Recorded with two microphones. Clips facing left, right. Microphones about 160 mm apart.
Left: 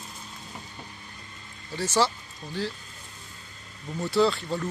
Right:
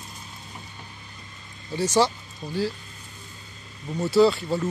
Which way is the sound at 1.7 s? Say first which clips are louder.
Right 4 dB; 15° right (ahead or behind).